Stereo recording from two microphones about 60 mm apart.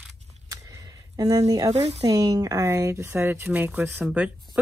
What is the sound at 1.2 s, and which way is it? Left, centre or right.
Speech, right.